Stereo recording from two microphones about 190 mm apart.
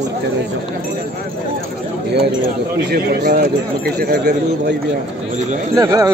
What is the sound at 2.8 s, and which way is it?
Speech, 55° right (ahead or behind).